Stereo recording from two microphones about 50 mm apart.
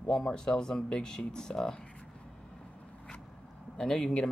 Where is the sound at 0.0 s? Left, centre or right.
Centre.